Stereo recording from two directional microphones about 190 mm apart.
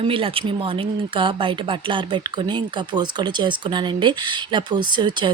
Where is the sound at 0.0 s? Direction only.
30° right (ahead or behind).